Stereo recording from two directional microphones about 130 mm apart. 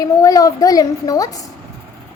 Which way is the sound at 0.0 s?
25° left (ahead or behind).